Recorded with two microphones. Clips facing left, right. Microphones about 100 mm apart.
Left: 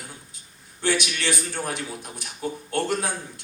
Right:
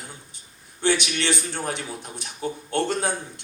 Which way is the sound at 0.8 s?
25° right (ahead or behind).